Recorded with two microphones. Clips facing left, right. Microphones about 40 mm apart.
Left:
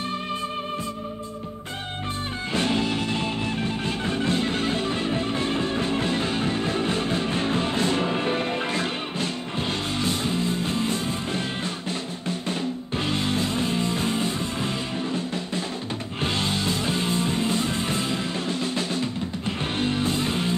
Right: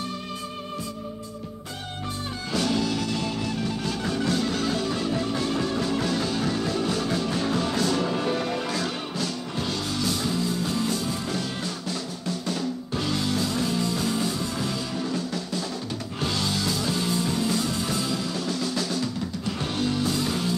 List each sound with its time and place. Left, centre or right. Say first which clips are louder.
2.5 s music: left 1 dB; left